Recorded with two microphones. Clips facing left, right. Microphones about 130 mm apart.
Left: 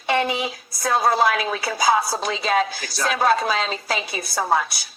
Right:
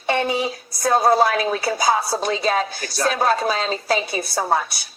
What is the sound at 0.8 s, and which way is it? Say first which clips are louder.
A woman's voice: right 3 dB; 40° right (ahead or behind).